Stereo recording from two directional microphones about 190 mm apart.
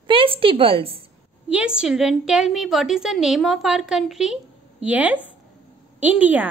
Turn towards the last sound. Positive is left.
turn(degrees=-10)  # may be behind; listen again after turning